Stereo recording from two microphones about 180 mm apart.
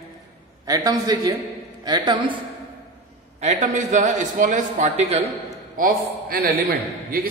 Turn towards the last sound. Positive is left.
turn(degrees=-55)  # may be behind; listen again after turning